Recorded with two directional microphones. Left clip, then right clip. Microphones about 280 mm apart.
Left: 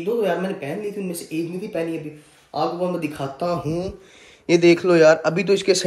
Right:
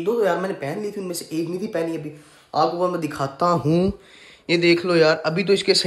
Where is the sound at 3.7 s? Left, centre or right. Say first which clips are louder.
Right 5 dB; right.